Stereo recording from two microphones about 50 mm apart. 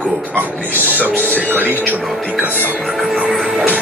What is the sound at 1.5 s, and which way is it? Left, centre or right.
Speech, right.